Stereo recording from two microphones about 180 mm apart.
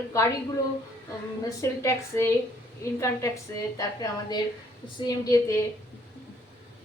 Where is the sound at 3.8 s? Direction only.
20° left (ahead or behind).